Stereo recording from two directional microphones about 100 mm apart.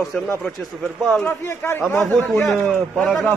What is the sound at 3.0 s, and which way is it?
Speech, centre (ahead or behind).